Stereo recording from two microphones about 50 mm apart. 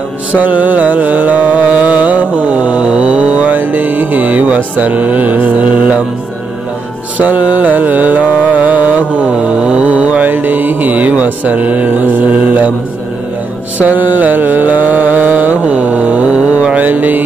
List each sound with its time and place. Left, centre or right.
0.4 s music: right
7.2 s music: right
9.6 s mantra: centre
13.7 s mantra: right